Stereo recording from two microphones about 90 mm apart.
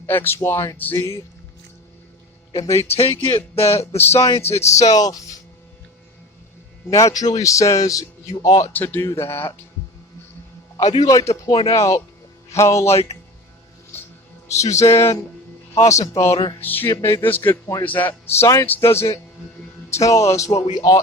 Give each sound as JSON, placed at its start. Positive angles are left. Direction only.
{"t": 0.1, "sound": "music", "side_deg": 25}
{"t": 0.8, "sound": "music", "side_deg": 20}
{"t": 2.5, "sound": "a man's voice", "side_deg": 35}
{"t": 3.0, "sound": "speech", "side_deg": 90}
{"t": 3.6, "sound": "a man's voice", "side_deg": 30}
{"t": 6.9, "sound": "a man's voice", "side_deg": 45}
{"t": 8.7, "sound": "music", "side_deg": 20}
{"t": 10.8, "sound": "a man's voice", "side_deg": 45}
{"t": 13.9, "sound": "music", "side_deg": 25}
{"t": 14.4, "sound": "a man's voice", "side_deg": 35}
{"t": 16.6, "sound": "music", "side_deg": 20}
{"t": 19.9, "sound": "a man's voice", "side_deg": 40}